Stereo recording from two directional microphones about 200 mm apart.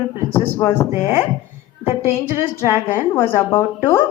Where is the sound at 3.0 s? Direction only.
10° left (ahead or behind).